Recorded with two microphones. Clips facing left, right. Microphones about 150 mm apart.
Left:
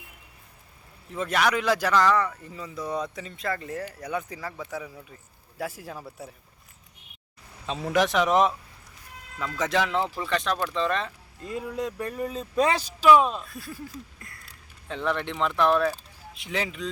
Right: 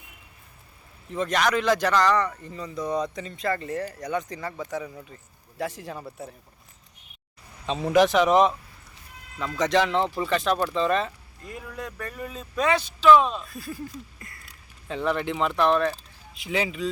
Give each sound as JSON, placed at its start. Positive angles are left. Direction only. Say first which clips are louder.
{"t": 1.1, "sound": "speech", "louder": "right 1 dB", "side_deg": 5}
{"t": 7.7, "sound": "speech", "louder": "right 4 dB", "side_deg": 0}
{"t": 9.6, "sound": "speech", "louder": "right 3 dB", "side_deg": 5}
{"t": 11.4, "sound": "speech", "louder": "left 6 dB", "side_deg": 25}
{"t": 12.2, "sound": "speech", "louder": "left 2 dB", "side_deg": 35}
{"t": 13.0, "sound": "speech", "louder": "right 1 dB", "side_deg": 10}